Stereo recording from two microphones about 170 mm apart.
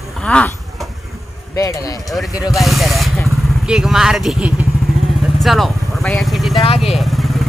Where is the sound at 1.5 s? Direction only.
20° left (ahead or behind).